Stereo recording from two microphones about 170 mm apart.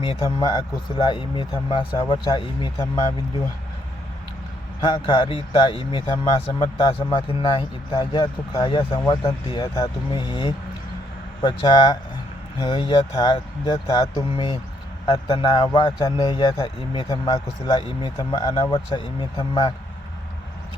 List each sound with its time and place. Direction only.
0.0 s speech: 30° left (ahead or behind)
4.8 s speech: 30° left (ahead or behind)